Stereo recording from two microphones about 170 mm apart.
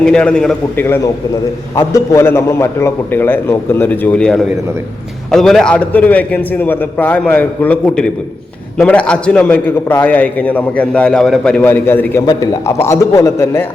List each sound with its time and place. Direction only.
0.0 s a man's voice: 5° left (ahead or behind)